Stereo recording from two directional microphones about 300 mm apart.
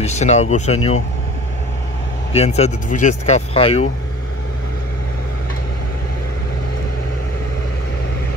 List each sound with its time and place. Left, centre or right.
0.0 s speech: left
2.3 s speech: left